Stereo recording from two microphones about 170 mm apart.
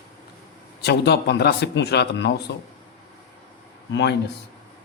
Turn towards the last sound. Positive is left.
turn(degrees=90)